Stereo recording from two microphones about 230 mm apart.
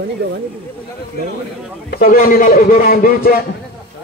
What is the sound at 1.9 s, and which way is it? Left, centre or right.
A man's voice, left.